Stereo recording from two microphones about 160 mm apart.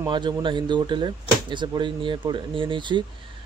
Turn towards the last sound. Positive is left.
turn(degrees=-30)  # may be behind; listen again after turning